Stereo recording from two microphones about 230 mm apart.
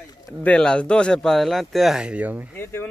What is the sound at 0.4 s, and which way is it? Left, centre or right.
Speech, centre.